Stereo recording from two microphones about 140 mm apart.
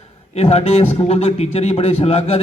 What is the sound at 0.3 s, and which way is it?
A man's voice, 45° left (ahead or behind).